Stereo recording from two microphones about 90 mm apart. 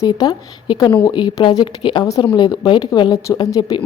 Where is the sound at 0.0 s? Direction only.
45° left (ahead or behind).